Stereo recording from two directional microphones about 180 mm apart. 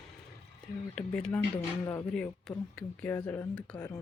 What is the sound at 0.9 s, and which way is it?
Speech, 5° left (ahead or behind).